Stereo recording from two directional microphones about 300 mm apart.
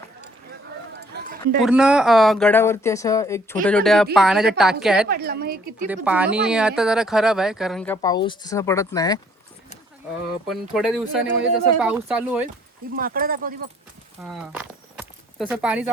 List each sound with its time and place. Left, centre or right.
1.6 s speech: centre
5.0 s a woman's voice: right
5.9 s speech: centre
10.5 s speech: centre
13.0 s speech: right
14.2 s walk: centre